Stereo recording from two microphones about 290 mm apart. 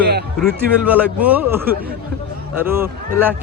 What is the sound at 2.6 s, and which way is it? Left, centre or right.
Speech, centre.